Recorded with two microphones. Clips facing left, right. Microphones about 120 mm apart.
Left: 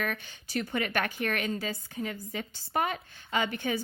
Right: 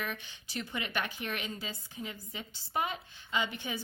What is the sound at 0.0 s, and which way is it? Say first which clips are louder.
A woman's voice: left 5 dB; 50° left (ahead or behind).